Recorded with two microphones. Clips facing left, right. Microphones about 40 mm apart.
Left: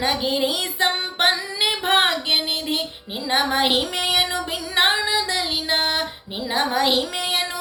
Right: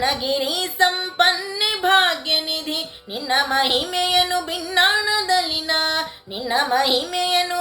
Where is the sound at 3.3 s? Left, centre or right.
Centre.